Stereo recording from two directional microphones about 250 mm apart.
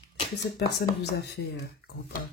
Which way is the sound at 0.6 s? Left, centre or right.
Left.